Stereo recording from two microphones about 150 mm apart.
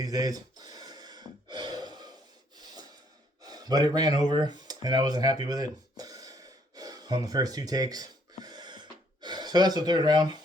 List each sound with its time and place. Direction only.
0.0 s gasp: 25° right (ahead or behind)
3.4 s speech: 25° right (ahead or behind)
8.4 s gasp: 30° right (ahead or behind)